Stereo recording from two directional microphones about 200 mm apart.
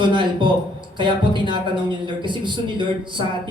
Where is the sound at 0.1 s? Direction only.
25° right (ahead or behind).